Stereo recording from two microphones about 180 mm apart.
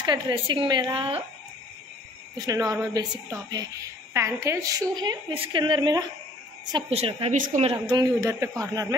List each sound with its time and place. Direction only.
0.0 s a woman's voice: 25° right (ahead or behind)
2.3 s a woman's voice: 20° right (ahead or behind)
7.3 s speech: 45° right (ahead or behind)
7.6 s a woman's voice: 25° right (ahead or behind)